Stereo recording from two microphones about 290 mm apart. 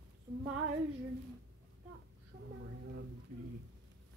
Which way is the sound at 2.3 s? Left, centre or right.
Right.